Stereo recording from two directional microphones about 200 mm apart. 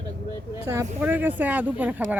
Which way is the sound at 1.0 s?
10° right (ahead or behind).